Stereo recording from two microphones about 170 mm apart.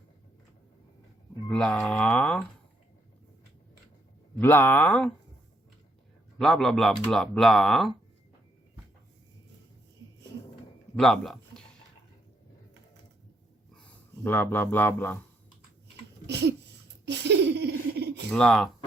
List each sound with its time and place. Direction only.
1.5 s a sound: 5° left (ahead or behind)
4.4 s speech: 10° left (ahead or behind)
6.4 s speech: centre (ahead or behind)
10.9 s a man's voice: centre (ahead or behind)
14.3 s speech: 10° left (ahead or behind)
16.2 s a sound: 85° right
17.1 s laughter: 90° right
18.3 s speech: 5° left (ahead or behind)